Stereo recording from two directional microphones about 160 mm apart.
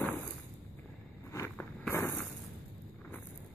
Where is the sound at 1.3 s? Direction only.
15° left (ahead or behind).